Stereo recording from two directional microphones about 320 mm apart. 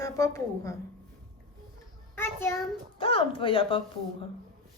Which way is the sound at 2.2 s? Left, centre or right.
Centre.